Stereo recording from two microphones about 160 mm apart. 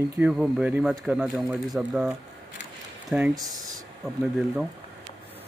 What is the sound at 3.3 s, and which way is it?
Speech, 25° right (ahead or behind).